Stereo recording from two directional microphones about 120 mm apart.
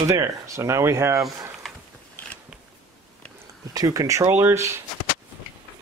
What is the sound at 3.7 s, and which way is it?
Speech, 30° right (ahead or behind).